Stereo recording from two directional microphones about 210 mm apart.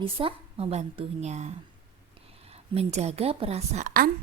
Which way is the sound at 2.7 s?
30° right (ahead or behind).